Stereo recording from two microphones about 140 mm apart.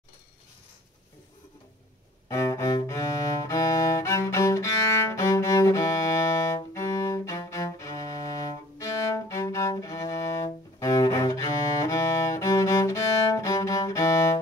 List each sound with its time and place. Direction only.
2.2 s cello: 25° left (ahead or behind)